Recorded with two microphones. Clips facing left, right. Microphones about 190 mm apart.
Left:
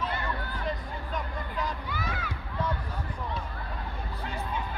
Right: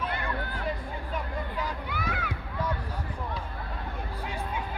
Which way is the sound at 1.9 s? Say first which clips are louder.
Right 2 dB; 60° right (ahead or behind).